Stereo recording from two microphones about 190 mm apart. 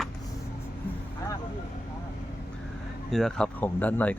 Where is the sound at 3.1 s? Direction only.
5° left (ahead or behind).